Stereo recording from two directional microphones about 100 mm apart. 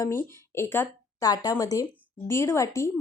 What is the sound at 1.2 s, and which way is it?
Speech, 40° left (ahead or behind).